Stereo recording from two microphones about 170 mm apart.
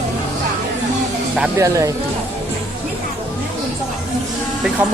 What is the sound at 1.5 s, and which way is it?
Speech, 20° right (ahead or behind).